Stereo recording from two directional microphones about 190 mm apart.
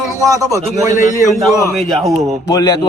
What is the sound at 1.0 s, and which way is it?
Speech, 40° left (ahead or behind).